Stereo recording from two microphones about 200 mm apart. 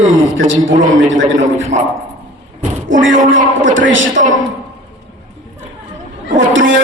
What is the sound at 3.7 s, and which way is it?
Speech, 70° right (ahead or behind).